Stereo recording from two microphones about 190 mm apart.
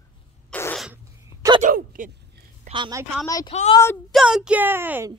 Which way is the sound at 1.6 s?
45° right (ahead or behind).